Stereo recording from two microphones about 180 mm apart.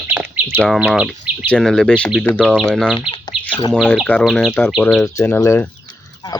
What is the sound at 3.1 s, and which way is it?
Chicken, 30° left (ahead or behind).